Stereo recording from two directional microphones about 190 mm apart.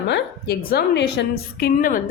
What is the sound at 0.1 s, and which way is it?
A woman's voice, 60° left (ahead or behind).